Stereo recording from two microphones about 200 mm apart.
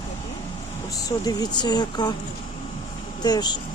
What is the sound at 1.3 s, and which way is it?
Speech, 20° left (ahead or behind).